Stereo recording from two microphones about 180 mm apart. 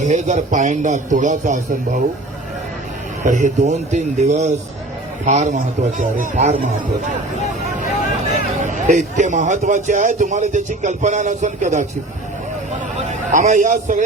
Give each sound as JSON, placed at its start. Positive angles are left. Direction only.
{"t": 0.0, "sound": "a man's voice", "side_deg": -40}
{"t": 3.2, "sound": "a man's voice", "side_deg": -45}
{"t": 8.3, "sound": "a man's voice", "side_deg": -45}
{"t": 13.1, "sound": "a man's voice", "side_deg": -40}